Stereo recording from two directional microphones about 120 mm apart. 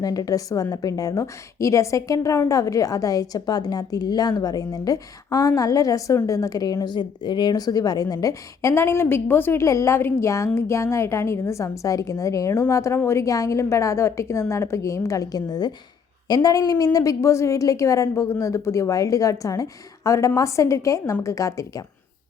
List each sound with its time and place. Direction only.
0.0 s a woman's voice: 30° left (ahead or behind)